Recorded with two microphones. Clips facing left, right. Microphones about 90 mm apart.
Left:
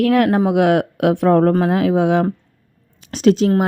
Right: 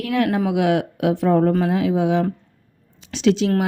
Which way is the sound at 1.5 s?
50° left (ahead or behind).